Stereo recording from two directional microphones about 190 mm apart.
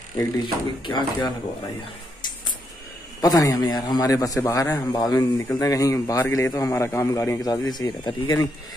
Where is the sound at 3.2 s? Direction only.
20° left (ahead or behind).